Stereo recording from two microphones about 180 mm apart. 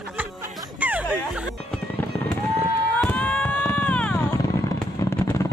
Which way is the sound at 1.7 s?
5° left (ahead or behind).